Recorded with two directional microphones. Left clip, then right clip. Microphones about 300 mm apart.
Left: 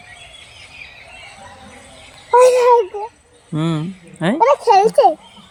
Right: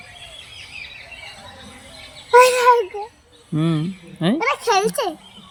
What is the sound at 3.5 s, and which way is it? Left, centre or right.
Speech, centre.